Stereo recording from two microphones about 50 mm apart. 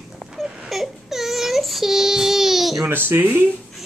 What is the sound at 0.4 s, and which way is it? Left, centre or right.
Child singing, centre.